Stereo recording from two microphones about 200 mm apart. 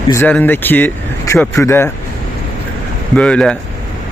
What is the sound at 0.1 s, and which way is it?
Speech, 10° left (ahead or behind).